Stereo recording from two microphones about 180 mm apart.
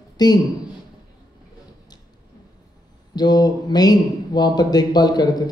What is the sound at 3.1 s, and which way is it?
A man's voice, 20° left (ahead or behind).